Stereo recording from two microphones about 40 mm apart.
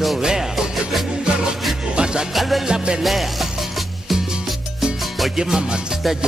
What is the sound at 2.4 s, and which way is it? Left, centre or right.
Music, centre.